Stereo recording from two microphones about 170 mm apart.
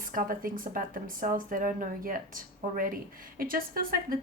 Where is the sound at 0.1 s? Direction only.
55° right (ahead or behind).